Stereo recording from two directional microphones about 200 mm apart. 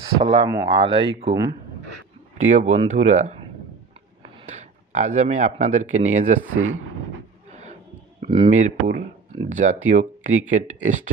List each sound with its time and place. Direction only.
0.2 s speech: 25° right (ahead or behind)
2.3 s speech: 40° right (ahead or behind)
7.4 s a sound: 35° right (ahead or behind)
8.2 s speech: 30° right (ahead or behind)